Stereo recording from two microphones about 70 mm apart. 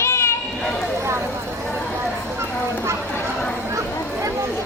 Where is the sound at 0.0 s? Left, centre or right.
Left.